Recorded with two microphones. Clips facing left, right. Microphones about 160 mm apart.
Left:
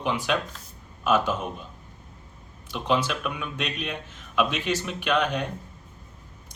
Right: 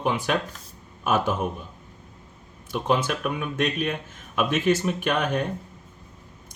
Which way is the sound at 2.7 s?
50° right (ahead or behind).